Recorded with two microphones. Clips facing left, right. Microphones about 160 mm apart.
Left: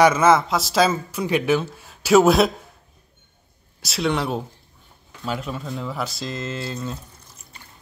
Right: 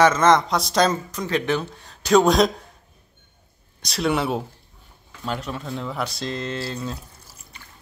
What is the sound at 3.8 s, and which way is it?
Speech, centre (ahead or behind).